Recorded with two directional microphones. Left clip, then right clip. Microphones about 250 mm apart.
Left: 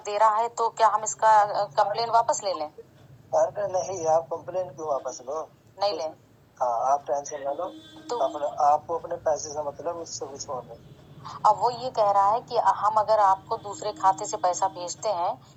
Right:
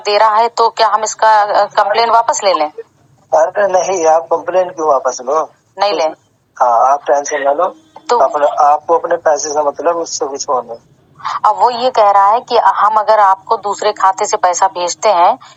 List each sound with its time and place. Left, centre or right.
0.0 s a woman's voice: right